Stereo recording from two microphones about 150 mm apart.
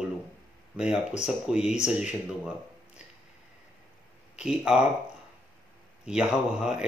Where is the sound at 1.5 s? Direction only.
5° right (ahead or behind).